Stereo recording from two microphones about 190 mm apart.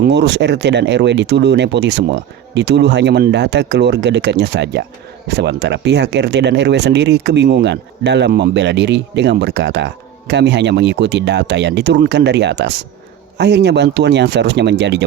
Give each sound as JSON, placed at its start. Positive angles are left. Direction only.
{"t": 0.0, "sound": "speech", "side_deg": -65}